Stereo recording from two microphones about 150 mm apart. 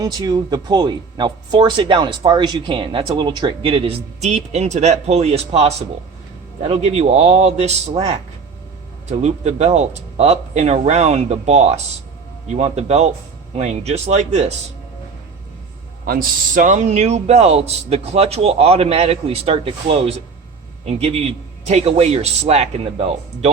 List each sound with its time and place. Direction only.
0.0 s a man's voice: 25° right (ahead or behind); by 14.5 s 50° right (ahead or behind)
16.0 s a man's voice: 70° right (ahead or behind); by 23.5 s 40° right (ahead or behind)